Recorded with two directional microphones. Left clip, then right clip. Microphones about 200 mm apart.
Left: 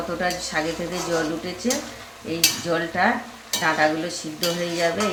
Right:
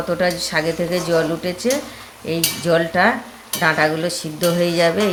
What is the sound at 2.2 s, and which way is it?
Speech, 50° right (ahead or behind).